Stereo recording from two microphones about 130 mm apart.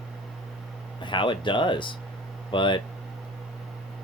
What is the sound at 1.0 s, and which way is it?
Speech, 40° left (ahead or behind).